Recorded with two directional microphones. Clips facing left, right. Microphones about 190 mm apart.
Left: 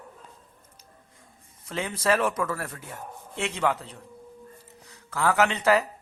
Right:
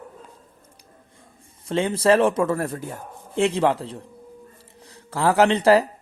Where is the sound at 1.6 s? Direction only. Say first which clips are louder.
Right 8 dB; 30° right (ahead or behind).